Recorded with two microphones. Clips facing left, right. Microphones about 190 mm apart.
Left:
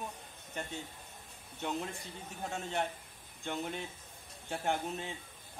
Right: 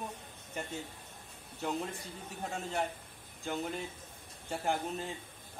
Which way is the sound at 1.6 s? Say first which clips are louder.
Right 1 dB; centre (ahead or behind).